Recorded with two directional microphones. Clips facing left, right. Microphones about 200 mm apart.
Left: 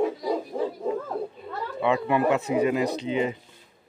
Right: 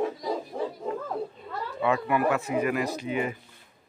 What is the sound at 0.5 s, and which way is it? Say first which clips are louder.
Bow-wow: left 3 dB; centre (ahead or behind).